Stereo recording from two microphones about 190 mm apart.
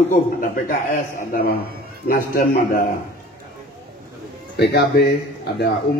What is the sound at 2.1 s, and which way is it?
Speech, 50° left (ahead or behind).